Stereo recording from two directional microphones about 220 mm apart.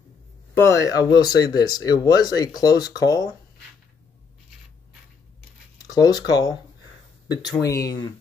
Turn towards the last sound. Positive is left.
turn(degrees=15)  # may be behind; listen again after turning